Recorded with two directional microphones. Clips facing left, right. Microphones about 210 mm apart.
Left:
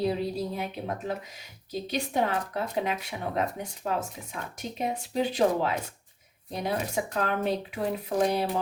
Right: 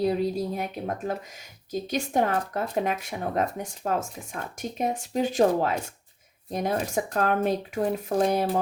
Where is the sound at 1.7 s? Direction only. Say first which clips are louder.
Right 3 dB; 45° right (ahead or behind).